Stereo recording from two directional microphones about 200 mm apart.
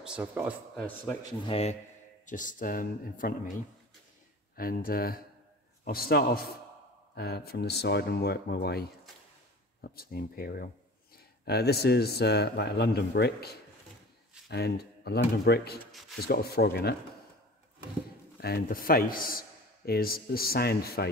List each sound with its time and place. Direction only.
0.0 s speech: 5° right (ahead or behind)
0.7 s speech: 5° left (ahead or behind)
1.5 s a man's voice: 30° left (ahead or behind); by 8.8 s 55° left (ahead or behind)
9.9 s a man's voice: 50° left (ahead or behind)
15.8 s speech: centre (ahead or behind)
16.2 s a man's voice: 50° left (ahead or behind)
18.4 s a man's voice: 50° left (ahead or behind)